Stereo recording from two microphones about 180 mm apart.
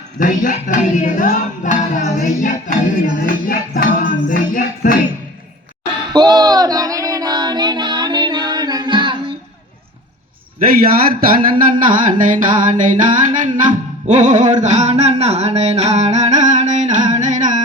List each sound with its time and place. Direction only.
0.2 s speech: 45° left (ahead or behind)
3.2 s music: 50° left (ahead or behind)
6.1 s female singing: 25° right (ahead or behind)
10.8 s a sound: 55° right (ahead or behind)